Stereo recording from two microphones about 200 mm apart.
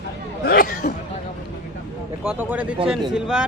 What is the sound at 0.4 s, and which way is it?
Chatter, 45° left (ahead or behind).